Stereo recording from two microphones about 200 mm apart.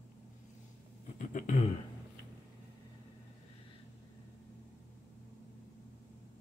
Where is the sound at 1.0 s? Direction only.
35° left (ahead or behind).